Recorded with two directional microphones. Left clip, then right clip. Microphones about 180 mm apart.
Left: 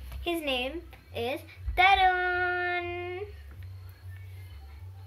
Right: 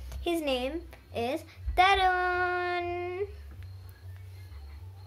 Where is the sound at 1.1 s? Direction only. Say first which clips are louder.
Right 1 dB; 45° right (ahead or behind).